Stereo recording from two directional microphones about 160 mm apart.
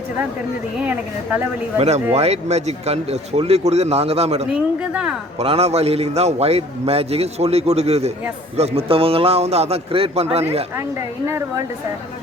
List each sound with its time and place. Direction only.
0.8 s speech: 10° right (ahead or behind)
2.1 s a man's voice: 40° right (ahead or behind)
4.5 s speech: 5° right (ahead or behind)
5.4 s a man's voice: 40° right (ahead or behind)